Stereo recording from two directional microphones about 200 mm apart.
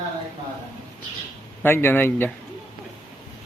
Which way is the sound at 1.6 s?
10° left (ahead or behind).